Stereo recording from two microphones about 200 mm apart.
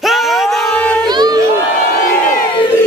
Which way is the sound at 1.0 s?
20° right (ahead or behind).